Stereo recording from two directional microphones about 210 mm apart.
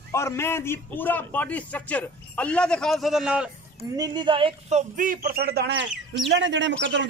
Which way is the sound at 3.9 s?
20° right (ahead or behind).